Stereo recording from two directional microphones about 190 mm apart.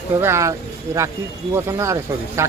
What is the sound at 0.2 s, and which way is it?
Speech, 15° right (ahead or behind).